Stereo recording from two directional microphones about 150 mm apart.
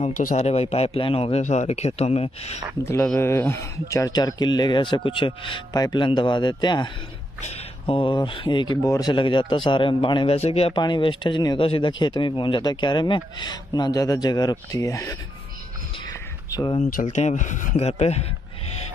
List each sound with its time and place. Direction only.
0.0 s speech: 65° left (ahead or behind)
0.4 s a man's voice: 45° left (ahead or behind)
2.8 s speech: 15° left (ahead or behind); by 10.8 s 40° left (ahead or behind)
10.8 s speech: 30° left (ahead or behind)
16.1 s a sound: 25° left (ahead or behind)
16.9 s a man's voice: 50° left (ahead or behind)